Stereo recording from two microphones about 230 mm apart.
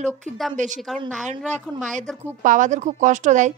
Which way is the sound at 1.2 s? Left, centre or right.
Right.